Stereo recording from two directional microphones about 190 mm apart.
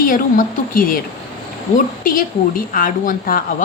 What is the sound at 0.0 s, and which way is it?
Speech, 45° left (ahead or behind).